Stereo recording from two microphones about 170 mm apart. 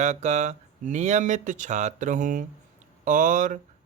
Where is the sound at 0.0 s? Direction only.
45° right (ahead or behind).